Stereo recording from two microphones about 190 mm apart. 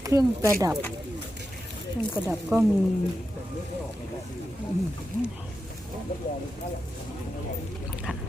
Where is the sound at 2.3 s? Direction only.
10° right (ahead or behind).